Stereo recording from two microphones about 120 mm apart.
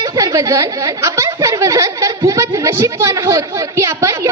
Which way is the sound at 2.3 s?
25° right (ahead or behind).